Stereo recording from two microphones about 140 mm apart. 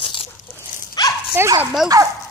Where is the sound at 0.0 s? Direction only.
40° left (ahead or behind).